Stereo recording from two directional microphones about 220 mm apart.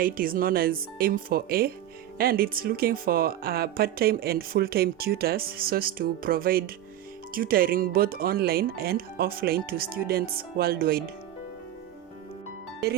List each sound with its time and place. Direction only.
0.0 s speech: 40° right (ahead or behind)